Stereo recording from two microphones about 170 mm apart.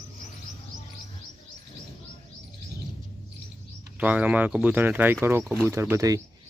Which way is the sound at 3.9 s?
10° right (ahead or behind).